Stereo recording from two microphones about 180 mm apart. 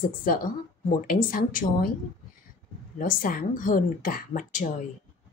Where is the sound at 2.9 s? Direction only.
50° left (ahead or behind).